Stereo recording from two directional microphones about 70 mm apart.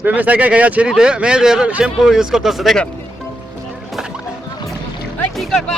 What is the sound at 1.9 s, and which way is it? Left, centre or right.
Speech, centre.